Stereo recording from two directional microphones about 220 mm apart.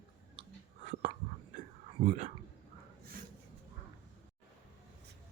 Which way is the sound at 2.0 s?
35° right (ahead or behind).